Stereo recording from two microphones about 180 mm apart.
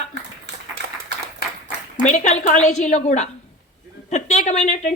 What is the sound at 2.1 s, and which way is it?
A woman's voice, 40° left (ahead or behind).